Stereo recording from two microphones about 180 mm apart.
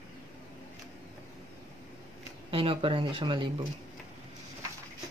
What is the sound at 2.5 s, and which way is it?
Speech, 30° right (ahead or behind).